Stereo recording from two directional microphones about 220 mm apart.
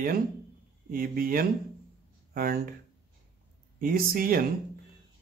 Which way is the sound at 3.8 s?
40° right (ahead or behind).